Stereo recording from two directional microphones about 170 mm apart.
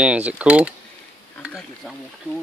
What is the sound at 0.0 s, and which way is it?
Speech, 5° right (ahead or behind).